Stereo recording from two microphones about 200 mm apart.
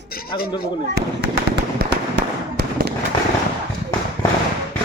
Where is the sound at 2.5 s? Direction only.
55° right (ahead or behind).